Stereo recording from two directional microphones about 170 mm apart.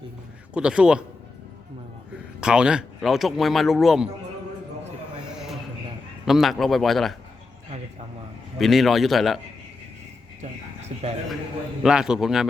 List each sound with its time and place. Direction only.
0.5 s speech: 5° right (ahead or behind)
2.4 s speech: 5° right (ahead or behind)
5.2 s a sound: 5° right (ahead or behind)
6.2 s speech: centre (ahead or behind)
8.5 s speech: centre (ahead or behind)
10.4 s speech: 40° right (ahead or behind)
11.8 s speech: 5° right (ahead or behind)